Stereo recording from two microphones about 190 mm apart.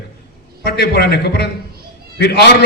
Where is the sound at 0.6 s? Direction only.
55° left (ahead or behind).